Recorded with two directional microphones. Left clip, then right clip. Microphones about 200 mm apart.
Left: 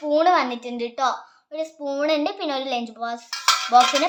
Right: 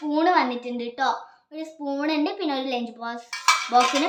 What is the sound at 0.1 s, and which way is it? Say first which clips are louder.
A child's voice: left 3 dB; 55° left (ahead or behind).